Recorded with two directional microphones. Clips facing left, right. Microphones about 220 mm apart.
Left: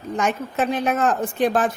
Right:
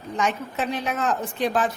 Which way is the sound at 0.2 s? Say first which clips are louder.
Left 3 dB; 50° left (ahead or behind).